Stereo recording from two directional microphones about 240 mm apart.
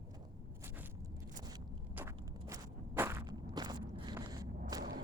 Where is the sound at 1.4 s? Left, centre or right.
Centre.